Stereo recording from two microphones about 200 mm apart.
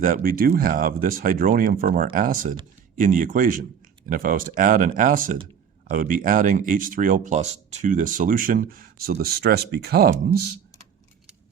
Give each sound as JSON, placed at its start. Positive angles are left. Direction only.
{"t": 0.0, "sound": "speech", "side_deg": -45}